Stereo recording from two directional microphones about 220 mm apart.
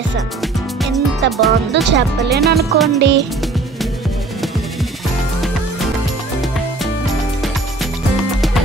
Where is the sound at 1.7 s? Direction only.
50° right (ahead or behind).